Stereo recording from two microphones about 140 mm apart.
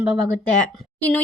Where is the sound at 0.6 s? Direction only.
10° left (ahead or behind).